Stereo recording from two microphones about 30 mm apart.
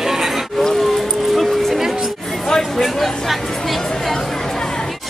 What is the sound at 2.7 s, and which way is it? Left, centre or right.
Speech, centre.